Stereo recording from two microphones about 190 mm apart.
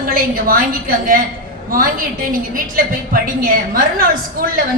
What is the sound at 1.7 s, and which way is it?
A woman's voice, 50° right (ahead or behind).